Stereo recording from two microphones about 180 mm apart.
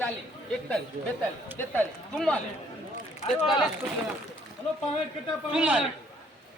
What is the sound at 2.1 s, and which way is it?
Speech, 5° left (ahead or behind).